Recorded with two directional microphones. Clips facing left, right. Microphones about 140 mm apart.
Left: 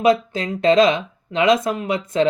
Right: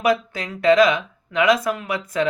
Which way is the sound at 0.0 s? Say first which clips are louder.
Left 4 dB; 25° left (ahead or behind).